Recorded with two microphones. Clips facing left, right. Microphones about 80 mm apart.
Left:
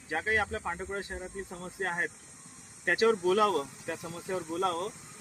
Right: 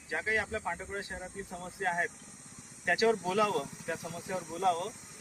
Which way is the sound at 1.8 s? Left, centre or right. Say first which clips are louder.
Right 1 dB; left.